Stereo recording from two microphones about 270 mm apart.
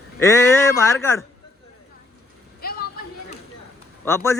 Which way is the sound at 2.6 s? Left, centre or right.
Left.